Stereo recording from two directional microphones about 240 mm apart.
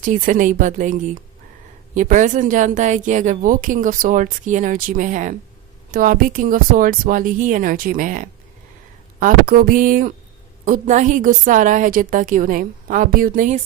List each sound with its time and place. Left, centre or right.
0.0 s speech: right